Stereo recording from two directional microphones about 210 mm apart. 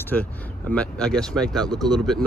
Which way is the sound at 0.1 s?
5° left (ahead or behind).